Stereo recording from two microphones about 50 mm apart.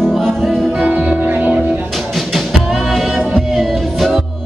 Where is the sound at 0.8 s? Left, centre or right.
Right.